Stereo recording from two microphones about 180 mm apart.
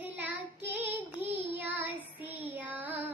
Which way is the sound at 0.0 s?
10° right (ahead or behind).